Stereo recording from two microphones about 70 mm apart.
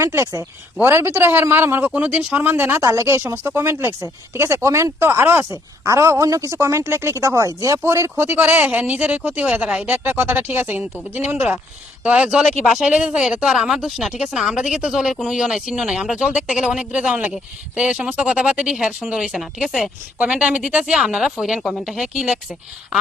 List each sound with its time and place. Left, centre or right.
0.0 s speech: right
0.8 s speech: right
1.9 s speech: right
2.8 s speech: right
5.5 s speech: right; by 9.9 s centre
9.9 s speech: right
12.0 s speech: centre